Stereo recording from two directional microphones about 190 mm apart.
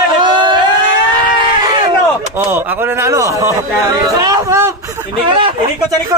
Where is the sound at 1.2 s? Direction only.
25° right (ahead or behind).